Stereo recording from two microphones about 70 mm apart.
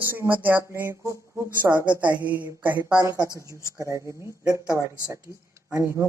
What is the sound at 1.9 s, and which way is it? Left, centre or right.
Speech, right.